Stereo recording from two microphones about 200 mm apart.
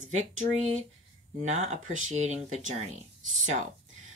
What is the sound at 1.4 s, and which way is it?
Speech, 35° right (ahead or behind).